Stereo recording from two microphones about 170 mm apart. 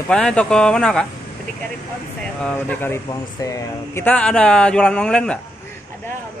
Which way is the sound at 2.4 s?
10° left (ahead or behind).